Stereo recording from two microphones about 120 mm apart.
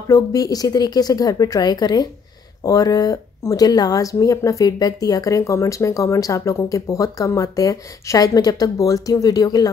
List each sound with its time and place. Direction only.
0.1 s a woman's voice: 30° left (ahead or behind)